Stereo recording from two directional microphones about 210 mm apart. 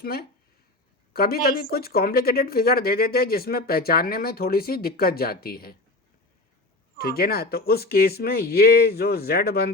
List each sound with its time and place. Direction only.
0.0 s speech: 45° left (ahead or behind)
7.0 s speech: 45° left (ahead or behind)